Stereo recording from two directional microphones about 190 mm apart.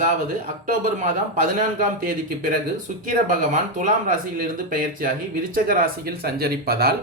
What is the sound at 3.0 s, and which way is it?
Speech, 45° right (ahead or behind).